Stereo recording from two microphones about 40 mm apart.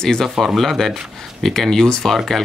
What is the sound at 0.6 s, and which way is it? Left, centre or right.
Speech, centre.